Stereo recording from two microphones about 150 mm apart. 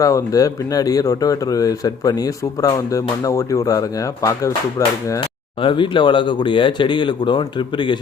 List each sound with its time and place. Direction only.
0.0 s speech: 20° left (ahead or behind)
5.6 s speech: 35° left (ahead or behind)